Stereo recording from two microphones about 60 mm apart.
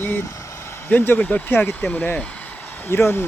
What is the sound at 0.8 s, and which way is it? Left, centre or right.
Speech, left.